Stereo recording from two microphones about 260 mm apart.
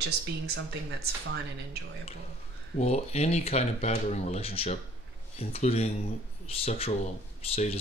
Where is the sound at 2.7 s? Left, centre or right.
Left.